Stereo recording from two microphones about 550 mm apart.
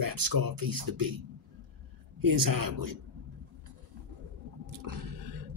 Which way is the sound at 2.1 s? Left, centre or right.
Right.